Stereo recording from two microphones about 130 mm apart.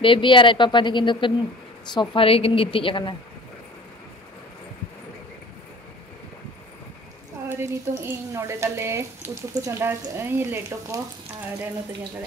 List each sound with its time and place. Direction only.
0.0 s a woman's voice: 40° left (ahead or behind)
7.4 s speech: 20° right (ahead or behind)